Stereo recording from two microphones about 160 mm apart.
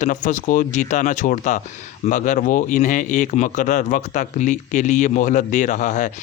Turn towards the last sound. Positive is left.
turn(degrees=50)  # may be behind; listen again after turning